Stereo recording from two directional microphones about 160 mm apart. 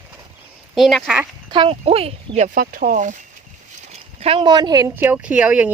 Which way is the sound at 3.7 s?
45° right (ahead or behind).